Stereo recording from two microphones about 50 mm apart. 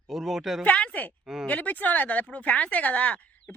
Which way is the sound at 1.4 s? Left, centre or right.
Left.